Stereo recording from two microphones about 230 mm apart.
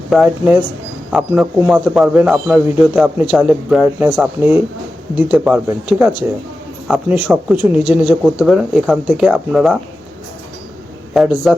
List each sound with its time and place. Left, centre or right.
0.1 s speech: centre
11.1 s speech: centre